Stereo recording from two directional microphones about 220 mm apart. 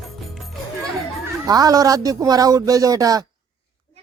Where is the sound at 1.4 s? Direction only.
15° right (ahead or behind).